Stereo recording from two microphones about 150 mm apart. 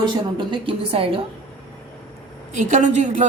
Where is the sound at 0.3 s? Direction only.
35° right (ahead or behind).